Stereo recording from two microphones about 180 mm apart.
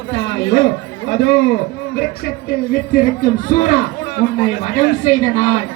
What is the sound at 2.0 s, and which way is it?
Speech, 60° left (ahead or behind).